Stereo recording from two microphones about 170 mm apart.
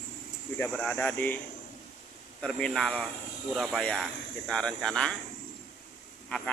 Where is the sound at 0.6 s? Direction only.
10° left (ahead or behind).